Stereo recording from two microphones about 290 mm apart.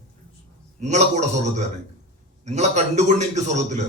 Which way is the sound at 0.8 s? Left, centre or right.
Right.